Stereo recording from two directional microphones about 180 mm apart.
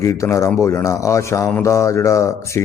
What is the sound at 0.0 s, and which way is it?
Speech, 15° left (ahead or behind).